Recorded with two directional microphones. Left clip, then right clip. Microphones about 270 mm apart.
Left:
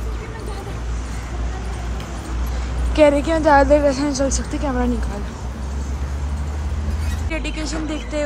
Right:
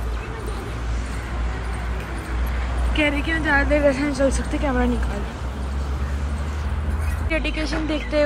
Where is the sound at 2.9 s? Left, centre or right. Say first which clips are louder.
Left 8 dB; centre.